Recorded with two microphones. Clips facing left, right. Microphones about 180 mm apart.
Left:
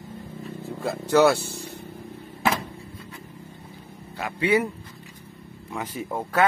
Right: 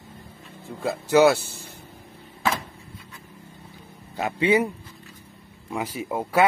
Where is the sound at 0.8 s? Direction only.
Centre (ahead or behind).